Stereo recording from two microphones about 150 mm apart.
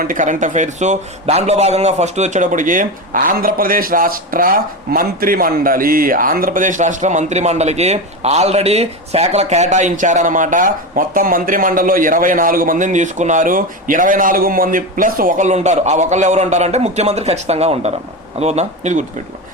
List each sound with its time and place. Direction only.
0.0 s a man's voice: 60° right (ahead or behind)